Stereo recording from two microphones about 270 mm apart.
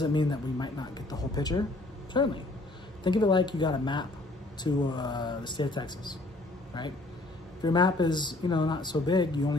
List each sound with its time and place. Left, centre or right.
0.0 s speech: centre